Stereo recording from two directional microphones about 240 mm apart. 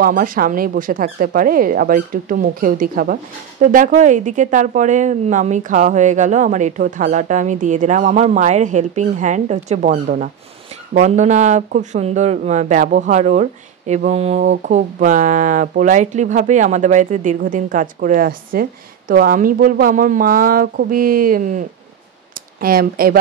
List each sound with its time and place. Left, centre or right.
0.0 s speech: right